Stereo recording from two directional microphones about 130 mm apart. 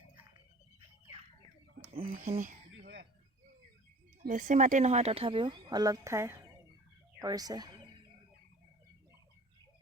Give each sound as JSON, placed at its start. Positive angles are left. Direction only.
{"t": 2.0, "sound": "speech", "side_deg": -90}
{"t": 4.3, "sound": "speech", "side_deg": -75}
{"t": 7.2, "sound": "a sound", "side_deg": -30}